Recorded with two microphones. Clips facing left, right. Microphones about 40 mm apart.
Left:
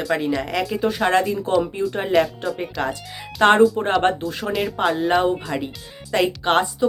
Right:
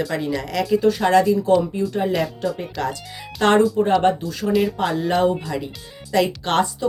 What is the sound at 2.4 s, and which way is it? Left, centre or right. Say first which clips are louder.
Speech: right 2 dB; centre.